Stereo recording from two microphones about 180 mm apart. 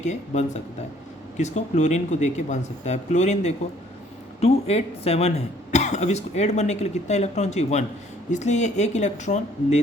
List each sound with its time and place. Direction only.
0.0 s speech: 40° left (ahead or behind)